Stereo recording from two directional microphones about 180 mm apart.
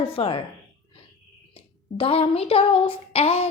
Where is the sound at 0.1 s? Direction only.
30° left (ahead or behind).